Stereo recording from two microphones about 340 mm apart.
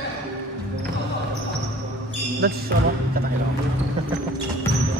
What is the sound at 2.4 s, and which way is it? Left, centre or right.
Speech, right.